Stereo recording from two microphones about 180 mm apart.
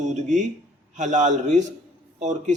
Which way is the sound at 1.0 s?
45° right (ahead or behind).